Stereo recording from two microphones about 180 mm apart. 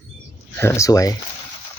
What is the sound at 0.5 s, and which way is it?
Speech, 15° left (ahead or behind).